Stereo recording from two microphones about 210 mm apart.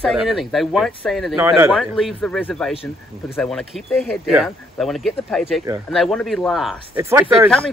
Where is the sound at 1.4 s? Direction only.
10° right (ahead or behind).